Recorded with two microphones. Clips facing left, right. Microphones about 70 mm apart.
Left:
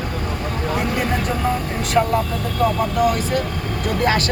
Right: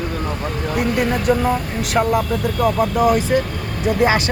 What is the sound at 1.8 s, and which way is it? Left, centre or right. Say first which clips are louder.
Speech: even; centre.